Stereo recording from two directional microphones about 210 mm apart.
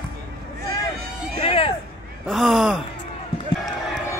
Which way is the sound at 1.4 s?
25° left (ahead or behind).